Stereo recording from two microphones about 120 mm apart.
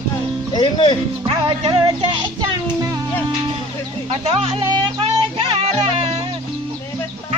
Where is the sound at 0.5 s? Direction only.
40° left (ahead or behind).